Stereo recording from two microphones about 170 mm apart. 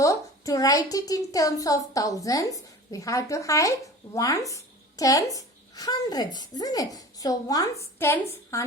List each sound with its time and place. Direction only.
0.0 s a woman's voice: 20° left (ahead or behind)